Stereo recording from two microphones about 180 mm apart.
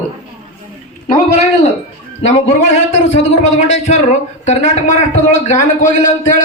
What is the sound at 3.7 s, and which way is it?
A man's voice, 40° left (ahead or behind).